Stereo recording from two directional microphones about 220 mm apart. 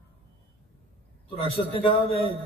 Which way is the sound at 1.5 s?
25° left (ahead or behind).